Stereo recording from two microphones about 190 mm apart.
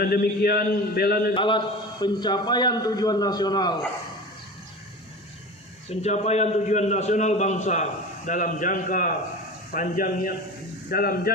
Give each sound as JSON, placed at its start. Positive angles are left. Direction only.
{"t": 0.0, "sound": "a man's voice", "side_deg": 50}
{"t": 1.3, "sound": "a man's voice", "side_deg": 25}
{"t": 5.9, "sound": "a man's voice", "side_deg": 35}